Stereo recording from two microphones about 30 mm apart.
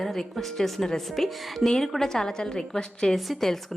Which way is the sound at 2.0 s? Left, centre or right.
Centre.